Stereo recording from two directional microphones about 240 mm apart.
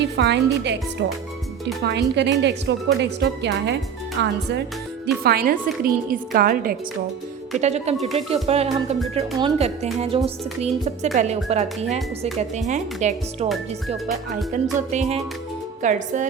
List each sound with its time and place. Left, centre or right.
0.0 s a woman's voice: right
7.6 s a woman's voice: right